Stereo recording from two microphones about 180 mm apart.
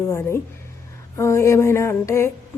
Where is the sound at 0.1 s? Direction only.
15° left (ahead or behind).